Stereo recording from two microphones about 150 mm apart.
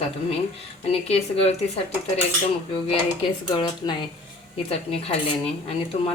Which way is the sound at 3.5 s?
30° left (ahead or behind).